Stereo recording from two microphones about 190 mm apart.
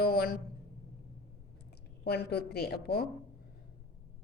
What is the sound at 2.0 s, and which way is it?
Speech, 55° left (ahead or behind).